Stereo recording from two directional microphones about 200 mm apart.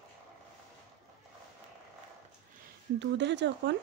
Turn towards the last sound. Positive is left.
turn(degrees=-60)  # may be behind; listen again after turning